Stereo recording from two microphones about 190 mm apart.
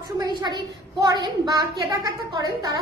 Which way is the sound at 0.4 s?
20° right (ahead or behind).